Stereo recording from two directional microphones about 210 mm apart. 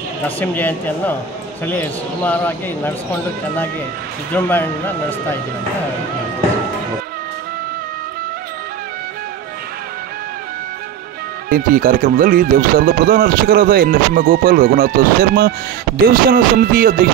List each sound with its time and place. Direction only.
0.4 s a man's voice: 10° left (ahead or behind)
4.3 s a man's voice: 10° left (ahead or behind)
11.4 s speech: 40° right (ahead or behind)